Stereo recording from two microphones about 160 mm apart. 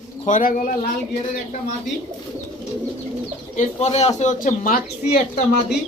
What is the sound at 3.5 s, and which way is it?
Speech, 45° left (ahead or behind).